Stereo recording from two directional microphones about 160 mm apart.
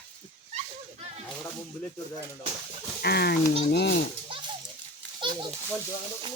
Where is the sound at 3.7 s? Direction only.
90° left.